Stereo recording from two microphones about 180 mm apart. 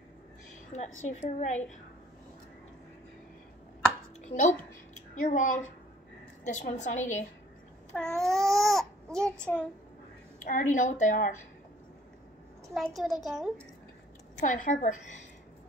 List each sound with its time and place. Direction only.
0.7 s a woman's voice: 40° left (ahead or behind)
4.2 s a sound: 40° left (ahead or behind)
6.4 s a woman's voice: 40° left (ahead or behind)
7.9 s babbling: 5° left (ahead or behind)
10.4 s a woman's voice: 45° left (ahead or behind)
12.7 s a child's voice: centre (ahead or behind)
14.4 s a woman's voice: 45° left (ahead or behind)